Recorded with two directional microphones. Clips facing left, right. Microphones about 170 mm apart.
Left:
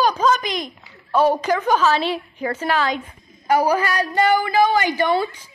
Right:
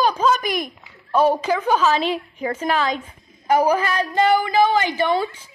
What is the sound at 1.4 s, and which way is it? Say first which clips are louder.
Speech: left 1 dB; 10° right (ahead or behind).